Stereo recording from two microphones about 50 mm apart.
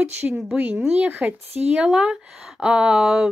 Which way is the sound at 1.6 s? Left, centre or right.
Right.